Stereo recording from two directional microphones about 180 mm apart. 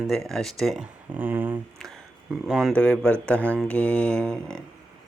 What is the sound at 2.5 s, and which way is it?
Mantra, centre (ahead or behind).